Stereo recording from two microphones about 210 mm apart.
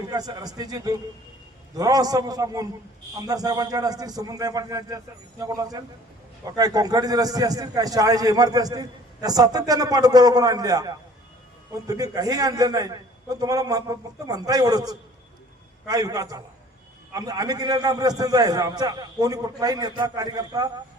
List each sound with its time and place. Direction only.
0.1 s a man's voice: 20° right (ahead or behind)